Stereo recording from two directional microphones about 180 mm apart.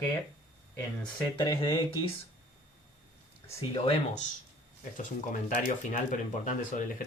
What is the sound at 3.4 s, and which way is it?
Speech, 35° left (ahead or behind).